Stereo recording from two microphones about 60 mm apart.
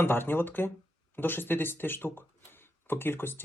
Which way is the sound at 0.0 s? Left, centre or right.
Left.